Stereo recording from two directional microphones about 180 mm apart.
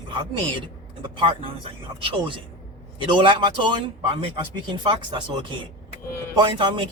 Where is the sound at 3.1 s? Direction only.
25° right (ahead or behind).